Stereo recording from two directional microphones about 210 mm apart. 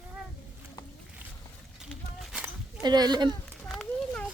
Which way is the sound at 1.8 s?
5° right (ahead or behind).